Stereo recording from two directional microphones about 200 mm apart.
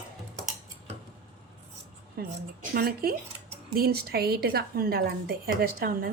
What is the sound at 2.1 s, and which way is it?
A woman's voice, 50° right (ahead or behind).